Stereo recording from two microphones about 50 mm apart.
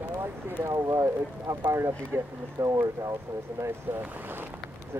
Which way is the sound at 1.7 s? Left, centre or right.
Right.